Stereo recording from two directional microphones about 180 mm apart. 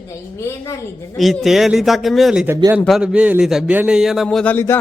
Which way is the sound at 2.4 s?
10° right (ahead or behind).